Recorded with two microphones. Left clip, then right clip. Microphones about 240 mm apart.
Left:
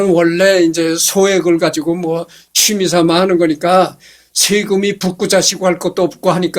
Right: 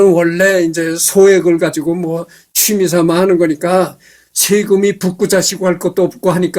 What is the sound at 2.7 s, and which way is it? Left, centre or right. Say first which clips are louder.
A man's voice: right 2 dB; right.